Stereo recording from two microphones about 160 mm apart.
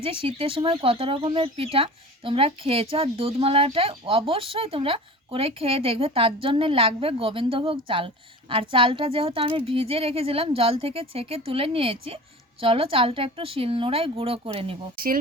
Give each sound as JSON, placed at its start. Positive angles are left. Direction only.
{"t": 0.0, "sound": "speech", "side_deg": -35}
{"t": 14.9, "sound": "speech", "side_deg": -65}